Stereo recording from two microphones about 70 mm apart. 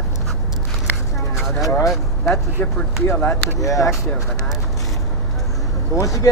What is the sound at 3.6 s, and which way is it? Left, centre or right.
Speech, left.